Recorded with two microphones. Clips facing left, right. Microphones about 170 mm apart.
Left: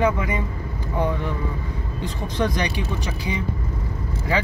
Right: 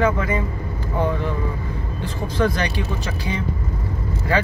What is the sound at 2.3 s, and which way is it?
Speech, 15° left (ahead or behind).